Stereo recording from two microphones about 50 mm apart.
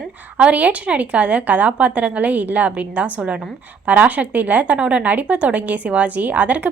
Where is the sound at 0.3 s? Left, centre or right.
Right.